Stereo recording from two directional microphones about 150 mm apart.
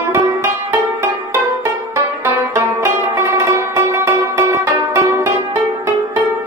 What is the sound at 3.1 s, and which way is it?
Music, 20° right (ahead or behind).